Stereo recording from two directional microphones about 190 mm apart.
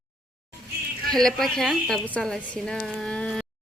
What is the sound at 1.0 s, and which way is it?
A woman's voice, centre (ahead or behind).